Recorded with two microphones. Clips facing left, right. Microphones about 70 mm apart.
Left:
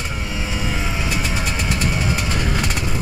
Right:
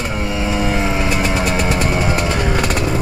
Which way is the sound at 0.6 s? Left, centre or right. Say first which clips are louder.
Right 6 dB; right.